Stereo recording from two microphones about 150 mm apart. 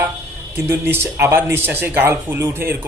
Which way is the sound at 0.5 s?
15° right (ahead or behind).